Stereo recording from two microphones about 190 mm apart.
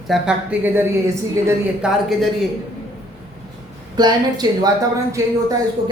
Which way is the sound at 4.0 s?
20° right (ahead or behind).